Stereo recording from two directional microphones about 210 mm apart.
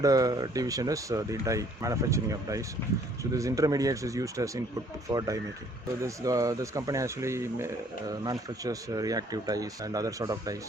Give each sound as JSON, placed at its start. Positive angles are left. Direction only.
{"t": 0.0, "sound": "speech", "side_deg": -15}